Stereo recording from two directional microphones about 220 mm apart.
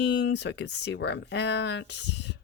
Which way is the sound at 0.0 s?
50° left (ahead or behind).